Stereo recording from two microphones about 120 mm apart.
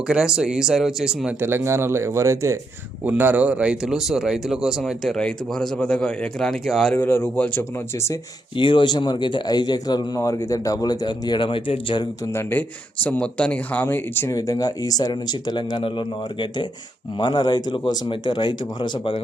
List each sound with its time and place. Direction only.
0.1 s speech: 5° right (ahead or behind)
1.4 s speech: 20° right (ahead or behind); by 6.9 s 5° left (ahead or behind)
6.9 s a man's voice: 15° left (ahead or behind)
7.9 s speech: 25° left (ahead or behind)
8.5 s speech: 45° left (ahead or behind)
12.2 s a man's voice: 20° left (ahead or behind)
14.3 s speech: 30° left (ahead or behind)